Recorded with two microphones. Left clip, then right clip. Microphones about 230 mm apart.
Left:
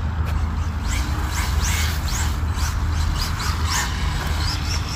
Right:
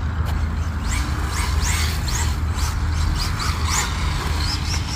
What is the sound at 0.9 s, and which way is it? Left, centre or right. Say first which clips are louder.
Music: right 1 dB; centre.